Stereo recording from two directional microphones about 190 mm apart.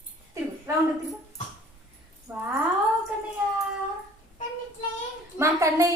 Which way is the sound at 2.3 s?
10° right (ahead or behind).